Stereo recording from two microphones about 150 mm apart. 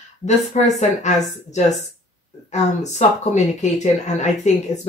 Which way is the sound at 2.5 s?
50° left (ahead or behind).